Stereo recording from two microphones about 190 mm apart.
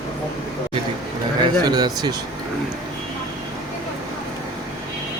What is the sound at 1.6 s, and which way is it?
Speech, 20° right (ahead or behind).